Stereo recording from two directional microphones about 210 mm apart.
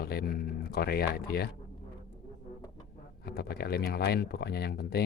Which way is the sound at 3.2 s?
50° left (ahead or behind).